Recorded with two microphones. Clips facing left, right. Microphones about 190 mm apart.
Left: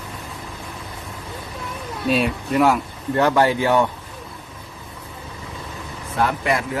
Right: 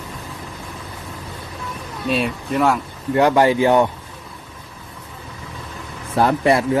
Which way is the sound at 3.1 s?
15° right (ahead or behind).